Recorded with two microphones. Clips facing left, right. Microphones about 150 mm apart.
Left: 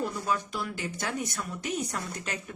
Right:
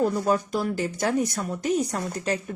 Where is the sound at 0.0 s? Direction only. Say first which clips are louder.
Right 8 dB; 40° right (ahead or behind).